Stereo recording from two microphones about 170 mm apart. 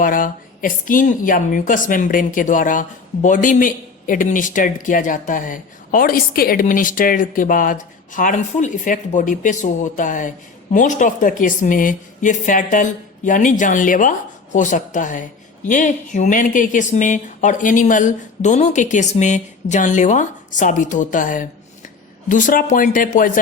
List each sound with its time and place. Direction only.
0.0 s speech: 55° left (ahead or behind)